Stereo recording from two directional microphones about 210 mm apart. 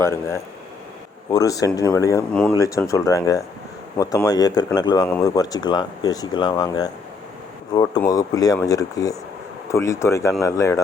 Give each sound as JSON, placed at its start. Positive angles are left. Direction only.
{"t": 0.0, "sound": "speech", "side_deg": 10}
{"t": 5.0, "sound": "speech", "side_deg": 10}
{"t": 5.3, "sound": "speech", "side_deg": 20}